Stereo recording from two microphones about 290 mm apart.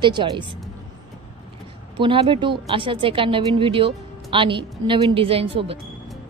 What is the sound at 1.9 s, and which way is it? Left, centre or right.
A woman's voice, centre.